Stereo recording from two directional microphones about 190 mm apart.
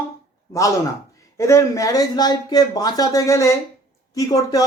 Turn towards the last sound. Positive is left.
turn(degrees=20)  # may be behind; listen again after turning